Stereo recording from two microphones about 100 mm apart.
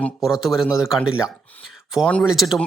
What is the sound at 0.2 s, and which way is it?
Speech, 5° right (ahead or behind).